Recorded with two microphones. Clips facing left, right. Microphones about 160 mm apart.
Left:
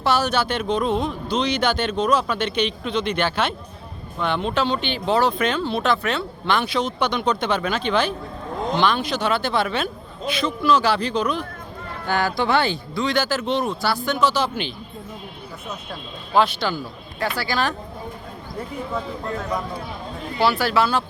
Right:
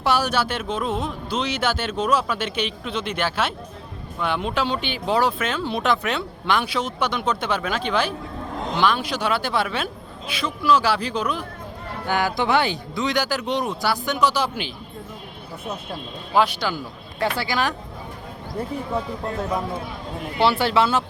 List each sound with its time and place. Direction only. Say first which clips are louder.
0.0 s speech: left 1 dB; 10° right (ahead or behind)
16.3 s speech: left 1 dB; 10° right (ahead or behind)
17.2 s speech: right 1 dB; 20° right (ahead or behind)
20.4 s speech: right 1 dB; 25° right (ahead or behind)